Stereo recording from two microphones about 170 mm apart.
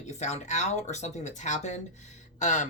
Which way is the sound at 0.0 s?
40° left (ahead or behind).